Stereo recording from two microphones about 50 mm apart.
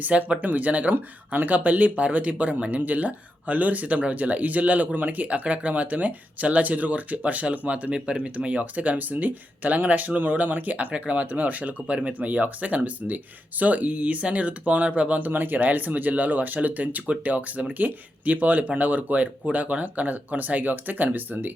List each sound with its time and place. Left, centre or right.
0.0 s speech: right